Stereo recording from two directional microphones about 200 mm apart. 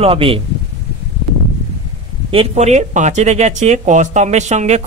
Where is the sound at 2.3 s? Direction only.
30° right (ahead or behind).